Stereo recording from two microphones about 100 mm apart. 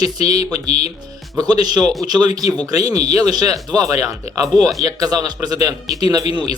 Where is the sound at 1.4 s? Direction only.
40° right (ahead or behind).